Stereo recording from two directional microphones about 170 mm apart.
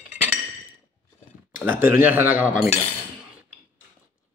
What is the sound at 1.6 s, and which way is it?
Speech, 10° right (ahead or behind).